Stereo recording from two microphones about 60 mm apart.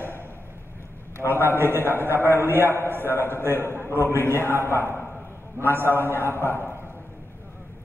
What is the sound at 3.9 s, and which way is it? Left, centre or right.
Speech, right.